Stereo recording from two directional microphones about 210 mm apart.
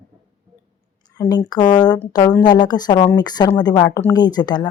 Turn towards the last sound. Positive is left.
turn(degrees=20)  # may be behind; listen again after turning